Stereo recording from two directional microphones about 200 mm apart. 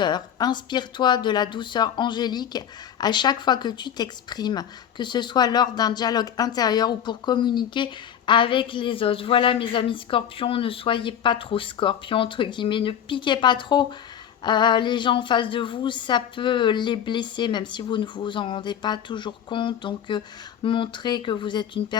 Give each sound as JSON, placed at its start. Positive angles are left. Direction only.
{"t": 0.0, "sound": "speech", "side_deg": 20}